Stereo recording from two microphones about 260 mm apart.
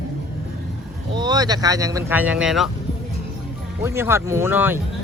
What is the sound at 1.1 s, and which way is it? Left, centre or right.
Speech, centre.